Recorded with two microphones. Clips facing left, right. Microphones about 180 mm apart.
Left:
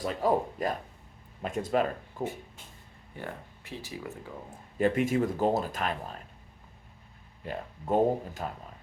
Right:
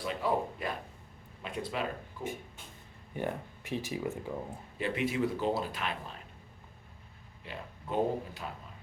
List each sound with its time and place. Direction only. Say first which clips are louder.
0.0 s speech: left 4 dB; 40° left (ahead or behind)
3.2 s speech: right 5 dB; 15° right (ahead or behind)
4.8 s speech: left 5 dB; 45° left (ahead or behind)
7.4 s speech: left 8 dB; 45° left (ahead or behind)